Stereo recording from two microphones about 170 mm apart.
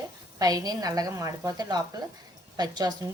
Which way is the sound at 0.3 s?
20° right (ahead or behind).